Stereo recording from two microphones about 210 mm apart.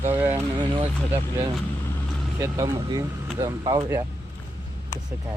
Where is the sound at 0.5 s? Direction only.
20° right (ahead or behind).